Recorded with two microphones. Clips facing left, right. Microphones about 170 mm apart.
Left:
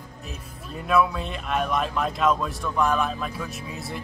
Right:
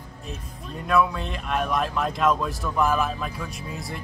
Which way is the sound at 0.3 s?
5° left (ahead or behind).